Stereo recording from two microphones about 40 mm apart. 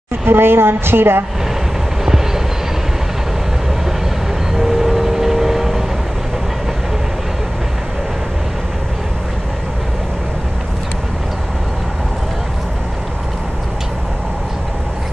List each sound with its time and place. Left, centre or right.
0.2 s a woman's voice: right
4.6 s vehicle: centre